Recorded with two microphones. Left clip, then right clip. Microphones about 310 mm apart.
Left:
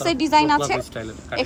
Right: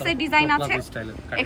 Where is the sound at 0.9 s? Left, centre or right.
Centre.